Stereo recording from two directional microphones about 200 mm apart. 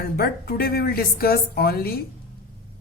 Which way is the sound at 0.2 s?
50° left (ahead or behind).